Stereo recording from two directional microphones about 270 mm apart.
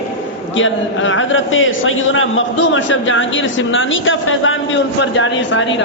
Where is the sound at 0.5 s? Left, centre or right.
Left.